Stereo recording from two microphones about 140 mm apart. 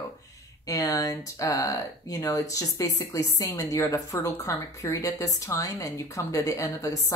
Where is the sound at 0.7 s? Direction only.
25° left (ahead or behind).